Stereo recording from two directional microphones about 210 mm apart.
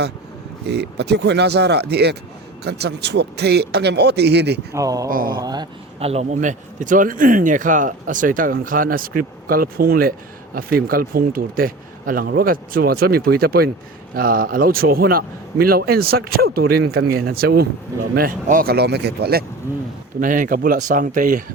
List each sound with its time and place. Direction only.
0.6 s speech: 50° right (ahead or behind)
4.7 s speech: 15° right (ahead or behind)
5.0 s speech: 40° right (ahead or behind)
5.3 s speech: 20° right (ahead or behind); by 21.4 s 40° right (ahead or behind)